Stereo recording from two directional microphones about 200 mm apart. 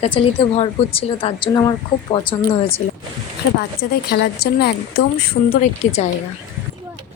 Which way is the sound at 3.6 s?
55° left (ahead or behind).